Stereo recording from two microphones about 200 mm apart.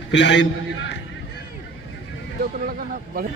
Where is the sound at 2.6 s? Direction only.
45° right (ahead or behind).